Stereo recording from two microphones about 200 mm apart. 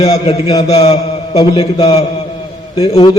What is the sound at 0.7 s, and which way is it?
Mantra, 30° left (ahead or behind).